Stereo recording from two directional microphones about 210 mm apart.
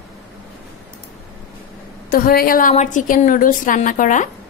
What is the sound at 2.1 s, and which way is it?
A woman's voice, 45° left (ahead or behind).